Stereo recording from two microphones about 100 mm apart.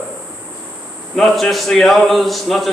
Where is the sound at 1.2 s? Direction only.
Centre (ahead or behind).